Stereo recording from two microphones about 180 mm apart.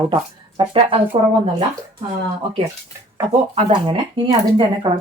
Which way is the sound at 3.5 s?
30° right (ahead or behind).